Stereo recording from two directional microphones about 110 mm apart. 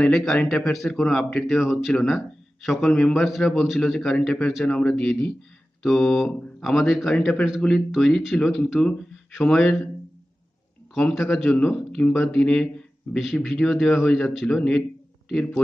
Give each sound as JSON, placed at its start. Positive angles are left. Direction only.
{"t": 0.0, "sound": "speech", "side_deg": 5}
{"t": 7.2, "sound": "speech", "side_deg": 10}
{"t": 7.4, "sound": "speech", "side_deg": 0}
{"t": 11.0, "sound": "speech", "side_deg": 5}
{"t": 14.8, "sound": "a sound", "side_deg": 5}